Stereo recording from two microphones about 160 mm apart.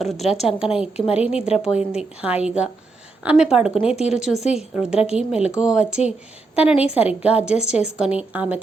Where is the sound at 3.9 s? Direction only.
40° left (ahead or behind).